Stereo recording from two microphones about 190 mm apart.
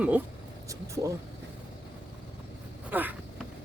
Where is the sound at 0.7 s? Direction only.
15° right (ahead or behind).